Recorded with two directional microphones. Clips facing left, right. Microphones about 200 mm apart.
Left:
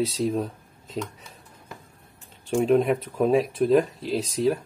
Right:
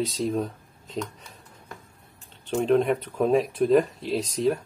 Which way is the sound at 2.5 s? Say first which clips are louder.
Left 1 dB; 5° left (ahead or behind).